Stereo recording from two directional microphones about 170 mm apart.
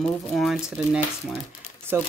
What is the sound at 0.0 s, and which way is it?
Speech, centre (ahead or behind).